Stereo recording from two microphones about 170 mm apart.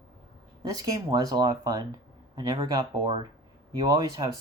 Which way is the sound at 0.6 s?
20° right (ahead or behind).